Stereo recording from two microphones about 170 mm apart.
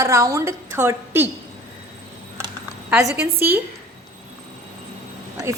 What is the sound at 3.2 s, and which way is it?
Speech, 15° right (ahead or behind).